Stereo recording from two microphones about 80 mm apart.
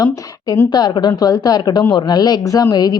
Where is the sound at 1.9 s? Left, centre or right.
Left.